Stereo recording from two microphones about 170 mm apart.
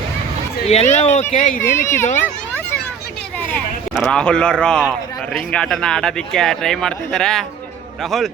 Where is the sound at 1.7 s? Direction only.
15° left (ahead or behind).